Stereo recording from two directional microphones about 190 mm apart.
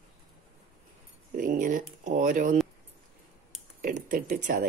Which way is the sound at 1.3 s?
45° right (ahead or behind).